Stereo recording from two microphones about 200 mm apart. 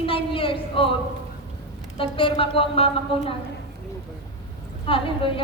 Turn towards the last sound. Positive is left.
turn(degrees=25)  # may be behind; listen again after turning